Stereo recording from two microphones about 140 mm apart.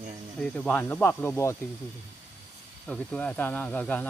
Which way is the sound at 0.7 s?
15° left (ahead or behind).